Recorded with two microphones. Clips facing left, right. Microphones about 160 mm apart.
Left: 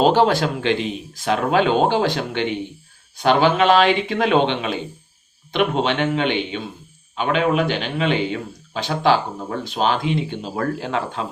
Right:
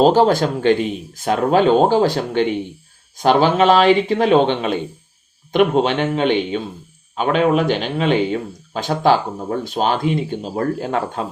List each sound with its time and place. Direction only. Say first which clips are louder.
0.0 s speech: right 3 dB; 40° right (ahead or behind)